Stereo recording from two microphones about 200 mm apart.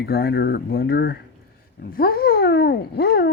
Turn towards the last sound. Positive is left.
turn(degrees=55)  # may be behind; listen again after turning